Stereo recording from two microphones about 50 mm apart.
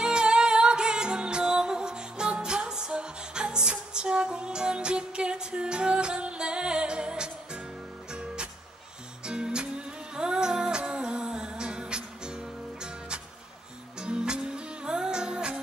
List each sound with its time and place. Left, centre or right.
0.0 s music: centre